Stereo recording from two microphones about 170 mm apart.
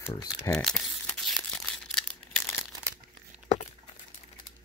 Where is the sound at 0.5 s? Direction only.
5° left (ahead or behind).